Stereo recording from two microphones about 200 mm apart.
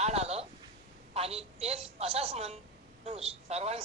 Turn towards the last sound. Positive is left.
turn(degrees=-30)  # may be behind; listen again after turning